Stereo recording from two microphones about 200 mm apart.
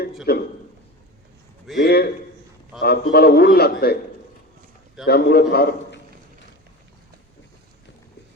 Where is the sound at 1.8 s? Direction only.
50° left (ahead or behind).